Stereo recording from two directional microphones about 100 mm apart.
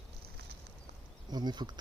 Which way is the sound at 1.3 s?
45° right (ahead or behind).